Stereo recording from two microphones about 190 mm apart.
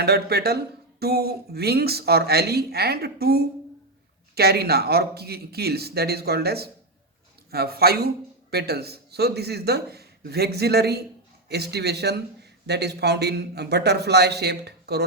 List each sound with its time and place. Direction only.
0.0 s a man's voice: 55° right (ahead or behind)